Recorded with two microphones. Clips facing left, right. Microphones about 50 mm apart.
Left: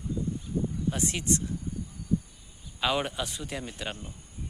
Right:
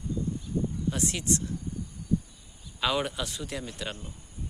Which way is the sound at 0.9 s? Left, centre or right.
Left.